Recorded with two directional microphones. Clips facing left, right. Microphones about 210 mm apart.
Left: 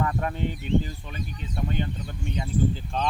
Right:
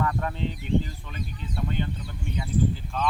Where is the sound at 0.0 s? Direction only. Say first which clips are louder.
Left 1 dB; 20° left (ahead or behind).